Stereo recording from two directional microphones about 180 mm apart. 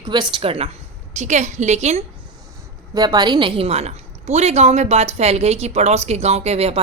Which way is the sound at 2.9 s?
20° right (ahead or behind).